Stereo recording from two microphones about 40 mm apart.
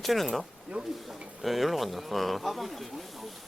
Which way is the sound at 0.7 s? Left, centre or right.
Right.